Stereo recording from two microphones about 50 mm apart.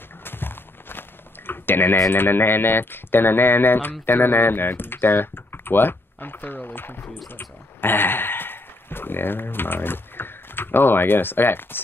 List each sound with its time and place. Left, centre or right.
0.2 s walk: left
2.0 s speech: left